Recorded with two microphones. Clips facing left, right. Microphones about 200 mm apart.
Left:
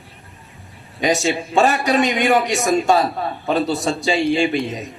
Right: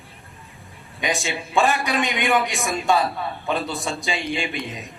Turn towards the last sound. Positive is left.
turn(degrees=40)  # may be behind; listen again after turning